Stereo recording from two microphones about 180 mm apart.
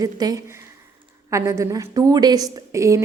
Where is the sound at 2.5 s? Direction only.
15° right (ahead or behind).